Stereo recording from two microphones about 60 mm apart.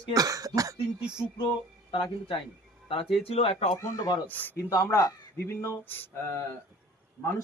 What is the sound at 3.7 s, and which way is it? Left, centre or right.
Speech, left.